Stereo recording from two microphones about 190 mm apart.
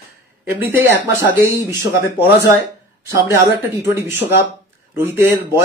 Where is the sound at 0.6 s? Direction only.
10° right (ahead or behind).